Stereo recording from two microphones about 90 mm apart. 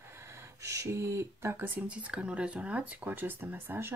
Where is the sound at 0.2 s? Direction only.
30° right (ahead or behind).